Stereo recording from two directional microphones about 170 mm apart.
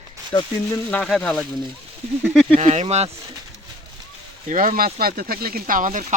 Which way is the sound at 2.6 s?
40° right (ahead or behind).